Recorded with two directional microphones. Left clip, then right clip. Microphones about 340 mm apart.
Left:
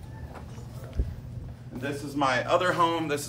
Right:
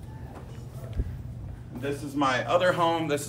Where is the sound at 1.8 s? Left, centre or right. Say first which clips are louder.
Even; centre.